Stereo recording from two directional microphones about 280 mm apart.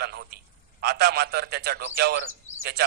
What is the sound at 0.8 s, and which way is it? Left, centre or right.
A man's voice, right.